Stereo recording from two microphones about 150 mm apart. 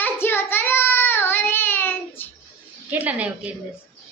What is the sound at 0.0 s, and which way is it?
Child singing, 15° left (ahead or behind).